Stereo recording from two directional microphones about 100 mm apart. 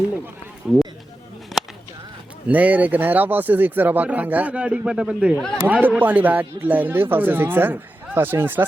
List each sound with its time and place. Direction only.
0.7 s speech: 10° right (ahead or behind)
1.6 s a sound: centre (ahead or behind)
2.5 s speech: 15° right (ahead or behind)